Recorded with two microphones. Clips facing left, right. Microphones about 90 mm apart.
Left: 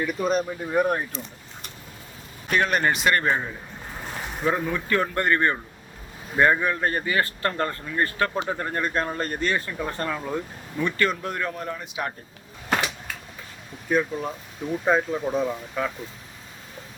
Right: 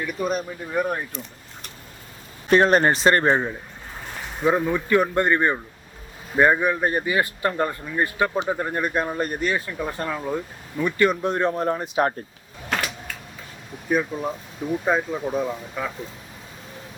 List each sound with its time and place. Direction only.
0.0 s speech: centre (ahead or behind)
2.5 s speech: 35° right (ahead or behind)
4.4 s speech: 15° right (ahead or behind); by 12.1 s 45° right (ahead or behind)
13.9 s speech: 10° right (ahead or behind)